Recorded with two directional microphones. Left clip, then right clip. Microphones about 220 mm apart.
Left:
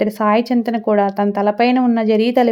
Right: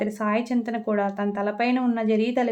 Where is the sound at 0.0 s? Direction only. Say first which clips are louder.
Left 10 dB; 35° left (ahead or behind).